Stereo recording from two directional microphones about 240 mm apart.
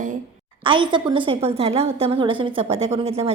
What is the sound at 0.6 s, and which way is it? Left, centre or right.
A woman's voice, centre.